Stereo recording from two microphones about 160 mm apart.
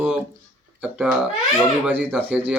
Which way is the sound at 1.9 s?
10° right (ahead or behind).